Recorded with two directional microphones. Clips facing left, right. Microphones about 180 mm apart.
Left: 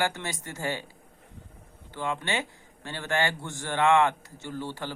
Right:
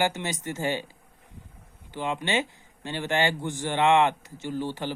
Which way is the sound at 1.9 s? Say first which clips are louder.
Right 3 dB; 20° right (ahead or behind).